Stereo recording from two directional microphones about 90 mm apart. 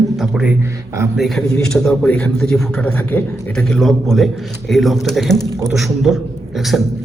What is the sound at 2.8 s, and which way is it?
Speech, 15° left (ahead or behind).